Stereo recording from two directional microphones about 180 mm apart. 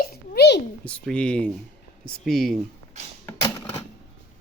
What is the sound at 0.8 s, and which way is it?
Speech, 5° left (ahead or behind).